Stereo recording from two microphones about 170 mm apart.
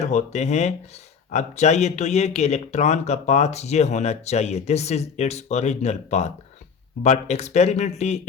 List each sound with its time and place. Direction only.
0.0 s speech: 40° left (ahead or behind)